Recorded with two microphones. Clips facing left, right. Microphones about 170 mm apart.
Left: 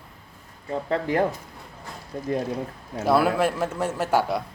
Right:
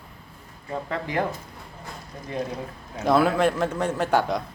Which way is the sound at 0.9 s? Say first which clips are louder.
Left 5 dB; 40° left (ahead or behind).